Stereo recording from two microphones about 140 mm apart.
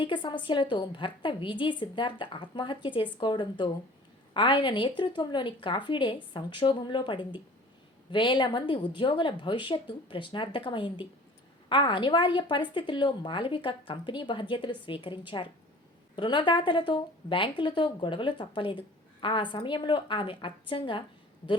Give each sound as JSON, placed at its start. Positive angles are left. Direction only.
{"t": 0.0, "sound": "a woman's voice", "side_deg": 35}